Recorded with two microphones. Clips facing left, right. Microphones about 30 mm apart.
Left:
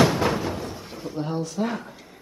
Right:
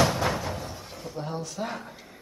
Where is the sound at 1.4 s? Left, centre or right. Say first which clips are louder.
Left 6 dB; centre.